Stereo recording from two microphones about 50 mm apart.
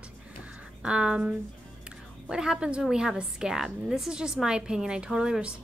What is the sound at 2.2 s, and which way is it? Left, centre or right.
A woman's voice, centre.